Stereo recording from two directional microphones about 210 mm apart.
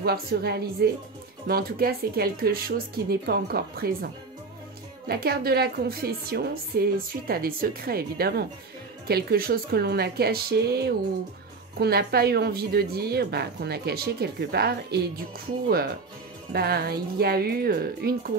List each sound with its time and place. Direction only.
0.0 s a woman's voice: 50° right (ahead or behind)
16.5 s a woman's voice: 50° right (ahead or behind)